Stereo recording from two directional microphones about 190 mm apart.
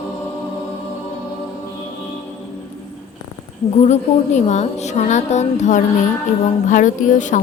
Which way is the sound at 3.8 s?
35° left (ahead or behind).